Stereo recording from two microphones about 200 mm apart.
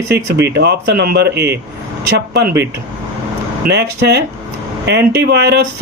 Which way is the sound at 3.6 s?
55° right (ahead or behind).